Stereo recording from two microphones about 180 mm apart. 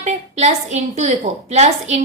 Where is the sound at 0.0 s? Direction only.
40° right (ahead or behind).